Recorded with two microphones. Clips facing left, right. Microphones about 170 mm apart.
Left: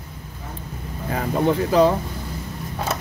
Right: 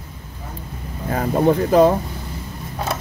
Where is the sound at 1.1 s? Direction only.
45° right (ahead or behind).